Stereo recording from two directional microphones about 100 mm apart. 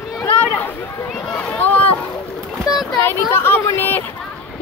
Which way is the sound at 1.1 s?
10° left (ahead or behind).